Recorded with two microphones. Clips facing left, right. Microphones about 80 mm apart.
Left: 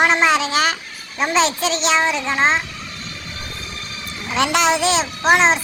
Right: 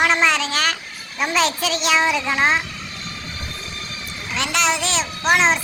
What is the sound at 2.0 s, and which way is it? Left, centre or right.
Speech, centre.